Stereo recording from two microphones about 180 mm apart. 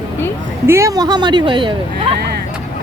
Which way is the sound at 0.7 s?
15° right (ahead or behind).